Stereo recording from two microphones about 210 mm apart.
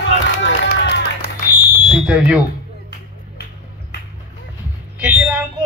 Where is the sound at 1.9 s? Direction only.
5° right (ahead or behind).